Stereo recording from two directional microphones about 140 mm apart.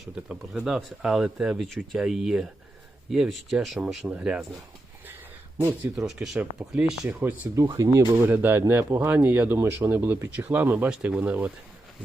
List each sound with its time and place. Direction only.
0.0 s speech: 5° right (ahead or behind)
5.5 s speech: 20° right (ahead or behind)
6.1 s speech: 5° right (ahead or behind)